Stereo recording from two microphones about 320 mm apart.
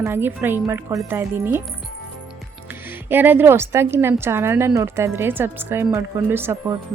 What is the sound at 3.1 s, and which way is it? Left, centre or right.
Speech, centre.